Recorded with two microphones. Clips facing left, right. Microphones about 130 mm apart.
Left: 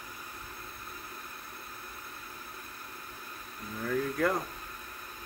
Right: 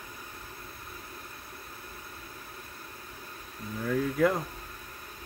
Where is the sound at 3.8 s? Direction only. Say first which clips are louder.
Right 4 dB; 5° right (ahead or behind).